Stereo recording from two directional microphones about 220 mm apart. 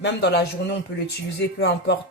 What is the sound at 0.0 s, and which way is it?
A man's voice, 50° left (ahead or behind).